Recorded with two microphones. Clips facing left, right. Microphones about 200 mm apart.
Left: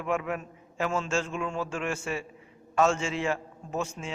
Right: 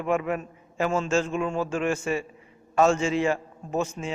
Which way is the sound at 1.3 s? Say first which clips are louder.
Right 5 dB; 40° right (ahead or behind).